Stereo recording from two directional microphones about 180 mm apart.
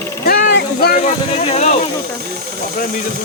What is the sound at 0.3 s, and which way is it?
Speech, 60° left (ahead or behind).